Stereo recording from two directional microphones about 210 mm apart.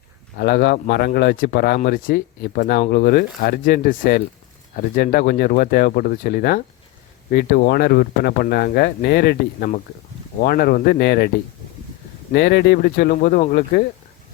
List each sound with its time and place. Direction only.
0.3 s speech: 45° left (ahead or behind)
12.3 s speech: 50° left (ahead or behind)